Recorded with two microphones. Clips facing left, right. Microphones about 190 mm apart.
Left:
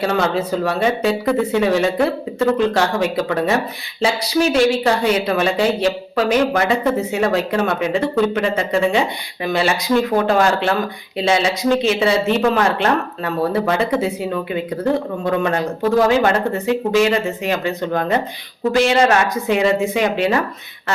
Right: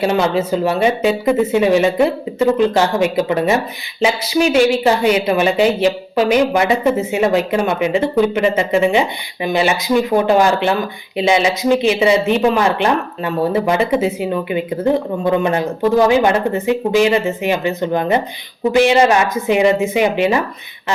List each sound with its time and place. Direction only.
0.0 s a woman's voice: 15° right (ahead or behind)
19.7 s a woman's voice: centre (ahead or behind)
20.0 s a woman's voice: 10° right (ahead or behind)